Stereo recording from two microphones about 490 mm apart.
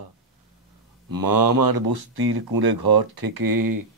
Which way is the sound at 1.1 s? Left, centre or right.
Right.